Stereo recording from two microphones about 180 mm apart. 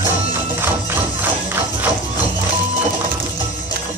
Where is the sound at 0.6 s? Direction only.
10° right (ahead or behind).